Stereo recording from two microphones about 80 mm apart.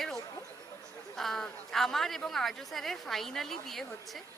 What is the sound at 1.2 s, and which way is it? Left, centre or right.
A woman's voice, centre.